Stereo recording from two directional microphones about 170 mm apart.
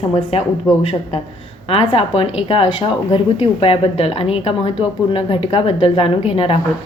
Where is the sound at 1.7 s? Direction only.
35° left (ahead or behind).